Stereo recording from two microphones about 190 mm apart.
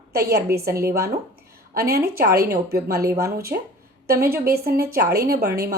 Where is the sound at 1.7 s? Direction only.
55° right (ahead or behind).